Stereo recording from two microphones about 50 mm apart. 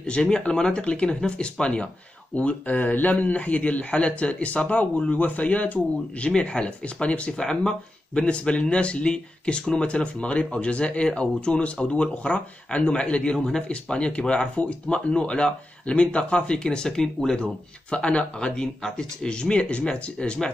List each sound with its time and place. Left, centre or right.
0.0 s speech: centre